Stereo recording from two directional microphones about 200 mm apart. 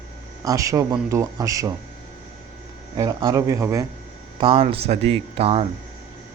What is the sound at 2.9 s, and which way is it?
Speech, 15° right (ahead or behind).